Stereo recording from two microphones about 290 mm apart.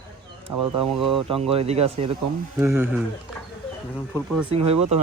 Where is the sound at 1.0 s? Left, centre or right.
Centre.